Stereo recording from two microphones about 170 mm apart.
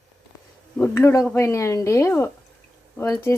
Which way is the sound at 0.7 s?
10° left (ahead or behind).